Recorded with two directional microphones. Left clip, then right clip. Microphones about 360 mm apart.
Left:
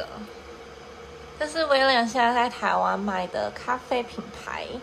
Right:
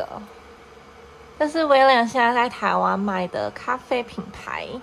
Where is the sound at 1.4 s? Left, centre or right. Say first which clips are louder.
Right 5 dB; centre.